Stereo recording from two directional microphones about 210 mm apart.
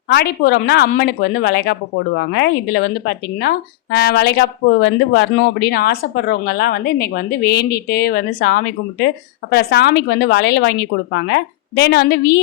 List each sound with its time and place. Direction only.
0.1 s speech: 50° left (ahead or behind)